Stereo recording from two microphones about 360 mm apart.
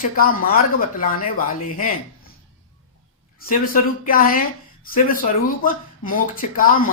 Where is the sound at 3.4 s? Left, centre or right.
Left.